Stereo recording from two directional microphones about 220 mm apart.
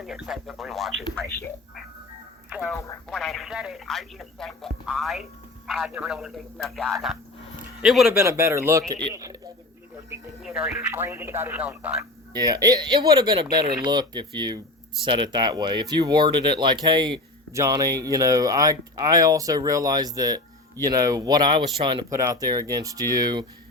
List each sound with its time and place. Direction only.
0.0 s speech: centre (ahead or behind)
2.5 s speech: 5° right (ahead or behind)
2.7 s speech: 15° left (ahead or behind)
3.1 s speech: centre (ahead or behind)
9.1 s a sound: 15° right (ahead or behind)
10.1 s speech: 5° right (ahead or behind)
12.3 s speech: 15° right (ahead or behind)